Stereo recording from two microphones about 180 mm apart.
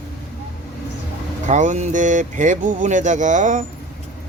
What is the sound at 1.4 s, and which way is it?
Speech, 40° right (ahead or behind).